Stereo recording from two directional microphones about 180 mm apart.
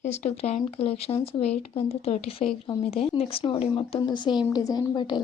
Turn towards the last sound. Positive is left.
turn(degrees=25)  # may be behind; listen again after turning